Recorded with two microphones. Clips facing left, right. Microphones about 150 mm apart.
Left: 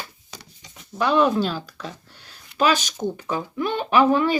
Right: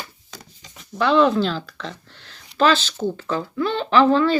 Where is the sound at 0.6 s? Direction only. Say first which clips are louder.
Right 1 dB; 90° right.